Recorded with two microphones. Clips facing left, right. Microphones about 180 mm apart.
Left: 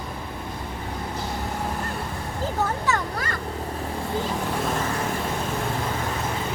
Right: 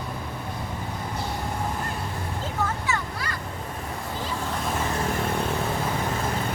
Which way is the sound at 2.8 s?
40° left (ahead or behind).